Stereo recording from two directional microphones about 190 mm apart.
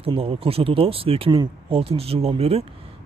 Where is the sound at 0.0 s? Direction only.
30° right (ahead or behind).